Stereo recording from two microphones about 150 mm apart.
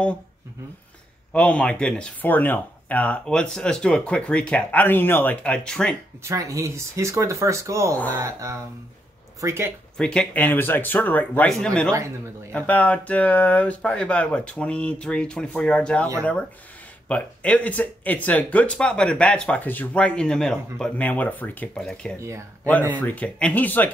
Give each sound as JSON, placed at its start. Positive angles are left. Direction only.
{"t": 1.3, "sound": "speech", "side_deg": 10}
{"t": 6.2, "sound": "speech", "side_deg": -20}
{"t": 9.9, "sound": "speech", "side_deg": 5}
{"t": 17.1, "sound": "speech", "side_deg": 10}
{"t": 22.2, "sound": "speech", "side_deg": -20}
{"t": 22.9, "sound": "speech", "side_deg": 10}